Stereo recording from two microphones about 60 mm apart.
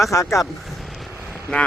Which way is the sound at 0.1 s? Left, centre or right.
Left.